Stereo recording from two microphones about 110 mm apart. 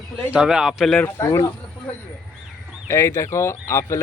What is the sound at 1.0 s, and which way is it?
Speech, 20° left (ahead or behind).